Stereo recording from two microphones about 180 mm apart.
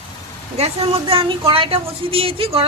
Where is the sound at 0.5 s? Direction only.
35° right (ahead or behind).